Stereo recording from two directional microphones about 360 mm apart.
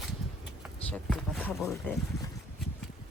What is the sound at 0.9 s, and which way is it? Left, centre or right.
Speech, centre.